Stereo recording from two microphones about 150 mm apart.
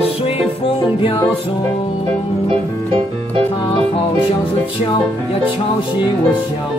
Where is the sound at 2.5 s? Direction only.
35° right (ahead or behind).